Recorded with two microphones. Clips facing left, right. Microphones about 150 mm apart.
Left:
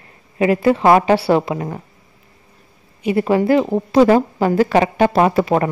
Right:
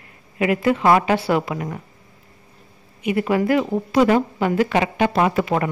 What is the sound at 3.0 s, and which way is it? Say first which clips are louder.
A woman's voice: left 4 dB; 30° left (ahead or behind).